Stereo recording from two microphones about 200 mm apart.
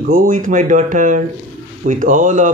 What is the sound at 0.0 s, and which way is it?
A man's voice, 40° right (ahead or behind).